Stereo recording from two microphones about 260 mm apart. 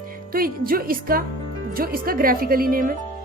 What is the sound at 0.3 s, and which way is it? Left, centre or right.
A woman's voice, right.